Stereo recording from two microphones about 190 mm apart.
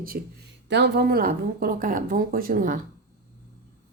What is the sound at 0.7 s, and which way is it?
Speech, 60° right (ahead or behind).